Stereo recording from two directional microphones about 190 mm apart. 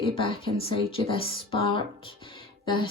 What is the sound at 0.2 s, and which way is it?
Speech, 30° left (ahead or behind).